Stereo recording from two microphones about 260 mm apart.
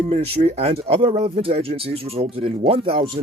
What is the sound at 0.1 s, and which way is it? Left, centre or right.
Speech, right.